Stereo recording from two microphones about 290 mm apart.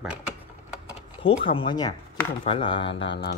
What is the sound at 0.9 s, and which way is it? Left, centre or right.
Speech, centre.